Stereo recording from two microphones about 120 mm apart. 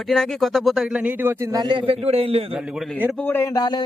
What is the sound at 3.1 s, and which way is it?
Speech, 15° left (ahead or behind).